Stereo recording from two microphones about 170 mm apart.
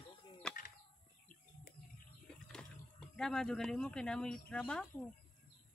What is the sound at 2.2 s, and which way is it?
Speech, 5° left (ahead or behind).